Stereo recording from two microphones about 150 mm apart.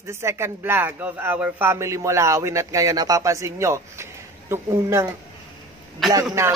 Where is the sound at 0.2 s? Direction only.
15° right (ahead or behind).